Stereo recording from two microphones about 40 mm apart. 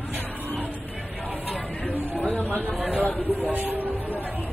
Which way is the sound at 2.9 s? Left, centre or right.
Left.